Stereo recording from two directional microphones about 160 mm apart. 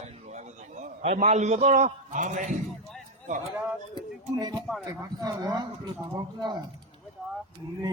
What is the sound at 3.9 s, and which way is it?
Speech, 25° right (ahead or behind).